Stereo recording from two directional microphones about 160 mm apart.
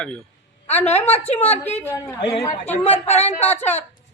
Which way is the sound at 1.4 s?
10° left (ahead or behind).